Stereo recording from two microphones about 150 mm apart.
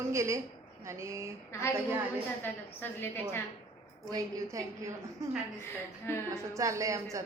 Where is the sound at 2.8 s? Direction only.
15° left (ahead or behind).